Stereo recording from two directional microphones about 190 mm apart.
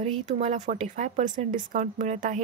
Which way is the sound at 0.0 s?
40° right (ahead or behind).